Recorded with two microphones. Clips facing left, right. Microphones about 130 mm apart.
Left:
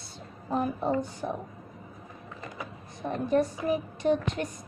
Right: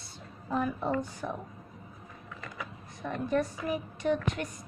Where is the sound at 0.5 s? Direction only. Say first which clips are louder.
Left 2 dB; 35° left (ahead or behind).